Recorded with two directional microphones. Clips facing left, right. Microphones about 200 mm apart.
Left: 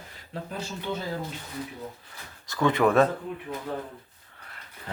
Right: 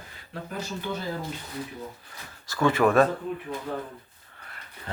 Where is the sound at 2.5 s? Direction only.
20° left (ahead or behind).